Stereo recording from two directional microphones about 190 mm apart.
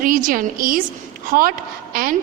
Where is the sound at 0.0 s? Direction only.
45° right (ahead or behind).